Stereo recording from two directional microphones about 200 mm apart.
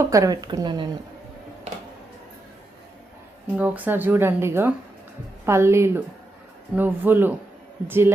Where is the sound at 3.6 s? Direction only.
10° right (ahead or behind).